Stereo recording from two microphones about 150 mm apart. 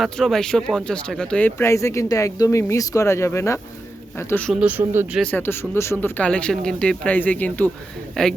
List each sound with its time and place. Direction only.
0.0 s speech: centre (ahead or behind); by 4.4 s 15° left (ahead or behind)
4.6 s speech: 10° right (ahead or behind)
5.2 s speech: 15° left (ahead or behind)